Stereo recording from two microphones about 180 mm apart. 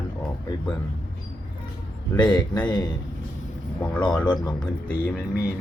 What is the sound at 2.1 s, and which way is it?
Speech, 25° left (ahead or behind).